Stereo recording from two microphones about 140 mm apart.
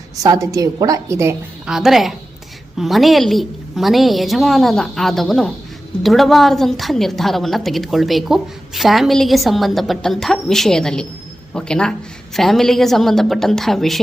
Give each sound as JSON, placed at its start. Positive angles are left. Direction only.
{"t": 0.2, "sound": "a woman's voice", "side_deg": -25}
{"t": 1.6, "sound": "a woman's voice", "side_deg": -5}